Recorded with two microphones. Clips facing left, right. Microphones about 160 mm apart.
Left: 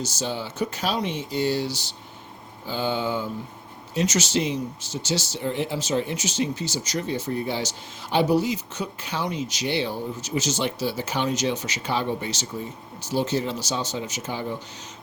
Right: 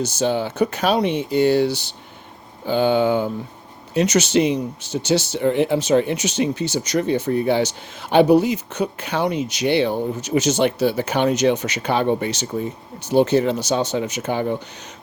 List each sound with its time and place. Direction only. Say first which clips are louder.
0.0 s speech: right 9 dB; 60° right (ahead or behind)